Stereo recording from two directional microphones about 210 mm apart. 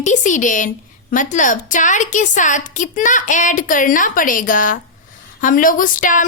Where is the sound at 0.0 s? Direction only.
35° left (ahead or behind).